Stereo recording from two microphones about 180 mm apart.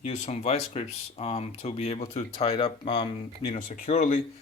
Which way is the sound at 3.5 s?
40° left (ahead or behind).